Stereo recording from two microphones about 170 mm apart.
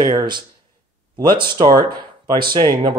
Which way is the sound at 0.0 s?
25° right (ahead or behind).